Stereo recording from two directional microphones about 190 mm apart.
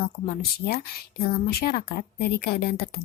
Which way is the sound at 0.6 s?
55° left (ahead or behind).